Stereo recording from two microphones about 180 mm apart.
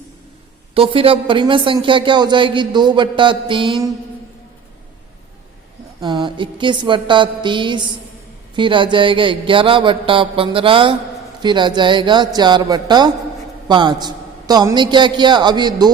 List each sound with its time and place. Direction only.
0.7 s speech: 30° right (ahead or behind)
6.0 s speech: 25° right (ahead or behind)